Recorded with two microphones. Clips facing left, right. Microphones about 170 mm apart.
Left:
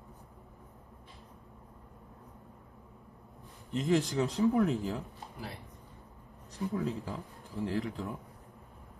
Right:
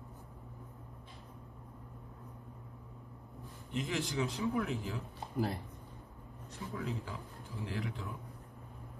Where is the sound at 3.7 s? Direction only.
40° left (ahead or behind).